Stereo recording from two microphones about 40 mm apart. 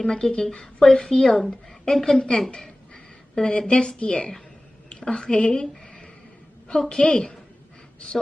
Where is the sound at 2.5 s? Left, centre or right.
Left.